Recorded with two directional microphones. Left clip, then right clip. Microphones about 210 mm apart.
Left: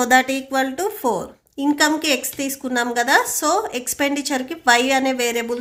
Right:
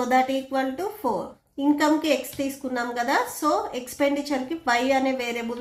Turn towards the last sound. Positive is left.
turn(degrees=45)  # may be behind; listen again after turning